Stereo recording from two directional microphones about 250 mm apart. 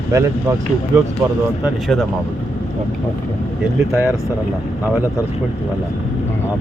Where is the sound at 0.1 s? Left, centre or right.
Centre.